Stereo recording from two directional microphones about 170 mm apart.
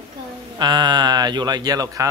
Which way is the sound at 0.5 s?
25° right (ahead or behind).